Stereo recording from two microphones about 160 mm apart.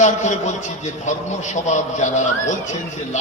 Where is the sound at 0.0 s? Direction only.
50° left (ahead or behind).